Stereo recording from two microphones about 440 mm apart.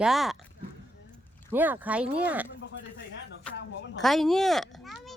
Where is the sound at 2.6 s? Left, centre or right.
Left.